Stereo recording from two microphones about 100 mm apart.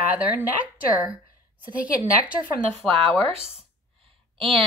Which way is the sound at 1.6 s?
15° right (ahead or behind).